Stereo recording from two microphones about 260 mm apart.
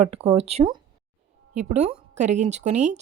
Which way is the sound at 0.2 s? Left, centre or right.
Right.